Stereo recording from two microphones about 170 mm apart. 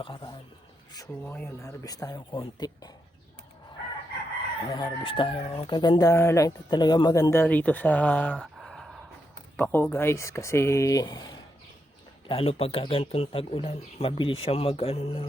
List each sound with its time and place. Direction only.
0.0 s speech: 30° left (ahead or behind)
1.2 s speech: 10° left (ahead or behind)
4.7 s speech: 30° left (ahead or behind); by 9.0 s centre (ahead or behind)
9.6 s speech: 10° left (ahead or behind); by 15.3 s 35° left (ahead or behind)